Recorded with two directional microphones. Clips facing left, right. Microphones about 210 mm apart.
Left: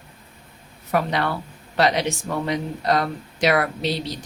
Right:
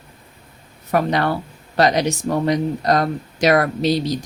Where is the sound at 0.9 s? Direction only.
45° right (ahead or behind).